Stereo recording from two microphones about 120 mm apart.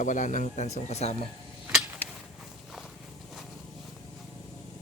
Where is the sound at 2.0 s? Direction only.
15° left (ahead or behind).